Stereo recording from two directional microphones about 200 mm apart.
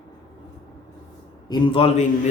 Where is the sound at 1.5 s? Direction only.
25° left (ahead or behind).